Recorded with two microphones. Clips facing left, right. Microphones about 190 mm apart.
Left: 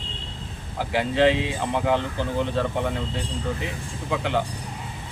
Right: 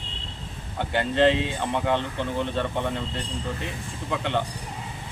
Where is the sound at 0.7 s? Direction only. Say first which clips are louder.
Left 1 dB; centre (ahead or behind).